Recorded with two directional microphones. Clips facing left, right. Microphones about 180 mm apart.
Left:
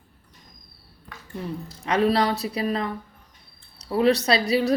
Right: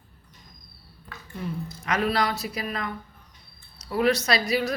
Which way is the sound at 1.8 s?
30° left (ahead or behind).